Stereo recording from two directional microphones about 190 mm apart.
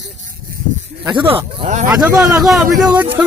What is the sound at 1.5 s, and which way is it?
Speech, 40° right (ahead or behind).